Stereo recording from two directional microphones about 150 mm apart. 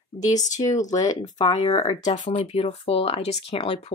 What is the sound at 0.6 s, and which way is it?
Speech, 30° left (ahead or behind).